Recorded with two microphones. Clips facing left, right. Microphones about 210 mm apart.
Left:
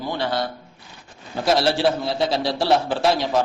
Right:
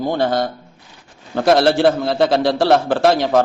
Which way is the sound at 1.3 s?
60° right (ahead or behind).